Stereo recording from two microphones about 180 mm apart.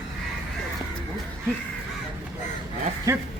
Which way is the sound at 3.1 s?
15° right (ahead or behind).